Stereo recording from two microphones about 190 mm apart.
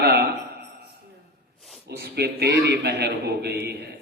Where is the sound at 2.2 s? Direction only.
60° right (ahead or behind).